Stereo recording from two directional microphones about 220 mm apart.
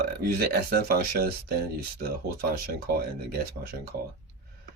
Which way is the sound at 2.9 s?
45° right (ahead or behind).